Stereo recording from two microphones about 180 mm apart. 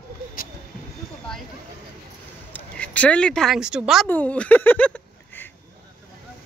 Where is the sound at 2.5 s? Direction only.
10° left (ahead or behind).